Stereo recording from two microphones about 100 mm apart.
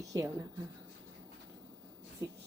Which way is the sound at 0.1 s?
30° right (ahead or behind).